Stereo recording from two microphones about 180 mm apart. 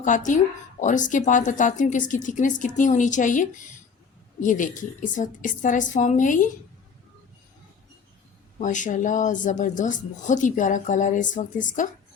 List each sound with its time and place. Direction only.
0.0 s a woman's voice: 45° left (ahead or behind)
8.5 s a woman's voice: 45° left (ahead or behind)